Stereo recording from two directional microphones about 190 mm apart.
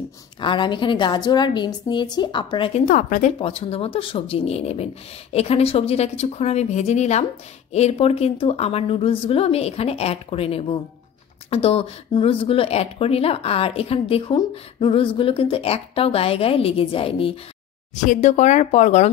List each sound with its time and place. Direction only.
0.4 s a woman's voice: 25° left (ahead or behind)
2.9 s a woman's voice: 45° left (ahead or behind)
3.3 s a woman's voice: 30° left (ahead or behind)
17.9 s a woman's voice: 40° left (ahead or behind)